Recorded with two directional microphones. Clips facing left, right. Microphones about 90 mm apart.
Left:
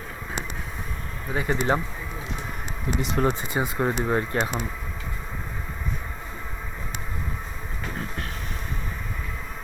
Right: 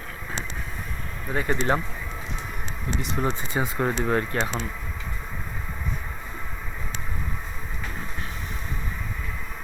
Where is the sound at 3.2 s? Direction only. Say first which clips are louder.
Left 4 dB; 60° left (ahead or behind).